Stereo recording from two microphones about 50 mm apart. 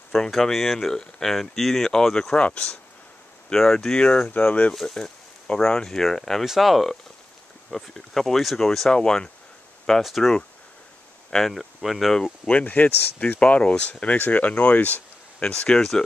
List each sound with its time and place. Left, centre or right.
0.1 s speech: centre
2.3 s speech: left
3.5 s speech: centre
4.3 s speech: left
4.8 s speech: centre
6.4 s speech: centre
10.0 s speech: centre
11.3 s speech: centre
12.4 s speech: left
13.4 s speech: left
15.4 s speech: left